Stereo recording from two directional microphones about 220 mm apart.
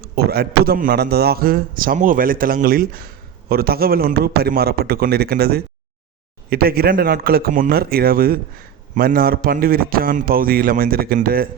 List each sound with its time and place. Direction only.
0.2 s a man's voice: 45° right (ahead or behind)